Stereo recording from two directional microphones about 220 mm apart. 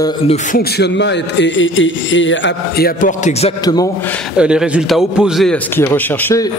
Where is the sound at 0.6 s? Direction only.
50° left (ahead or behind).